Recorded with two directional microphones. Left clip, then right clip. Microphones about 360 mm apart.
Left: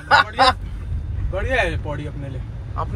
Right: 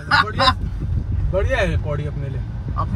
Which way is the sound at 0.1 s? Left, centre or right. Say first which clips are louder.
Left 2 dB; centre.